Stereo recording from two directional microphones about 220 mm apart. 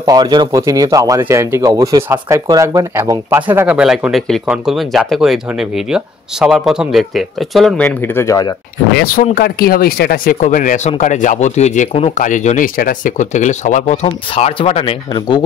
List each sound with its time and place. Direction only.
0.0 s speech: 20° right (ahead or behind); by 8.5 s 15° left (ahead or behind)
8.9 s speech: 40° left (ahead or behind); by 15.4 s 20° left (ahead or behind)